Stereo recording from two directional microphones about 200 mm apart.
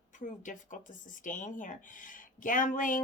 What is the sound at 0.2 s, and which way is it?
Speech, 40° left (ahead or behind).